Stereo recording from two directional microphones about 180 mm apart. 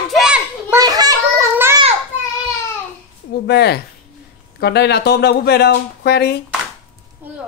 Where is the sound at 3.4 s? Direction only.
65° left (ahead or behind).